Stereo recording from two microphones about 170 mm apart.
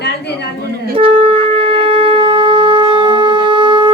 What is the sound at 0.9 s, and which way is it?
Shofar, 30° right (ahead or behind).